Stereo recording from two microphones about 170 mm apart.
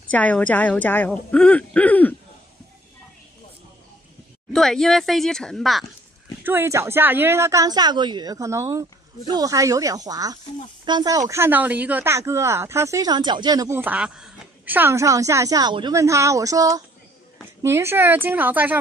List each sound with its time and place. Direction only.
0.1 s speech: 10° left (ahead or behind)
4.5 s speech: 5° left (ahead or behind)
6.4 s speech: 15° right (ahead or behind)